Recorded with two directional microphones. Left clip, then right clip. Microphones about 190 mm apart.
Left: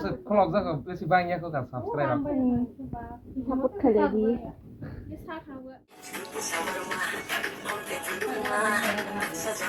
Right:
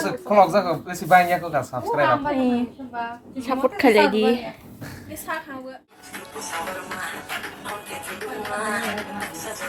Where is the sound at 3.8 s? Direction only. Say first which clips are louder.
Right 7 dB; 70° right (ahead or behind).